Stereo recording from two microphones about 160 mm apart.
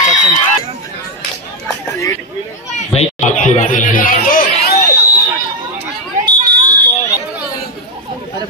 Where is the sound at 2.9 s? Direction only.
45° left (ahead or behind); by 4.5 s 60° left (ahead or behind).